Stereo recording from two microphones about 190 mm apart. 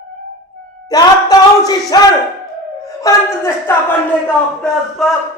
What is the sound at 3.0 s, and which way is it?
Speech, 15° left (ahead or behind).